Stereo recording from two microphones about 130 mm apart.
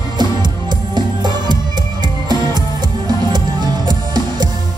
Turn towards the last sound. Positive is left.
turn(degrees=-35)  # may be behind; listen again after turning